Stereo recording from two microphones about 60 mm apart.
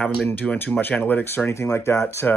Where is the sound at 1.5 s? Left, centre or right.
Left.